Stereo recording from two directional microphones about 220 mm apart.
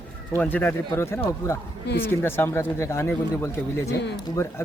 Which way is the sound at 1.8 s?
45° left (ahead or behind).